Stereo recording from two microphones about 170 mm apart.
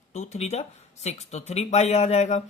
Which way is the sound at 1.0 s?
40° left (ahead or behind).